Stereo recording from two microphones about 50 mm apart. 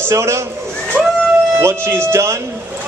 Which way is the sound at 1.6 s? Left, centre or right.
Right.